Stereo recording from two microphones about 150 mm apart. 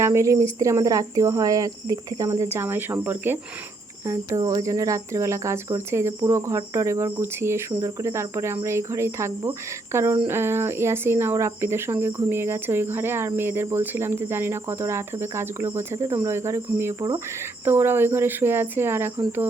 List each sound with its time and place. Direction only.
0.0 s speech: 20° right (ahead or behind)